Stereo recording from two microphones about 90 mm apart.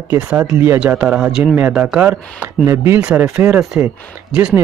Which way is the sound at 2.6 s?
30° right (ahead or behind).